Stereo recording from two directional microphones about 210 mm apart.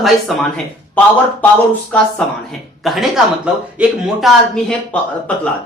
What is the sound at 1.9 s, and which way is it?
Speech, 5° left (ahead or behind).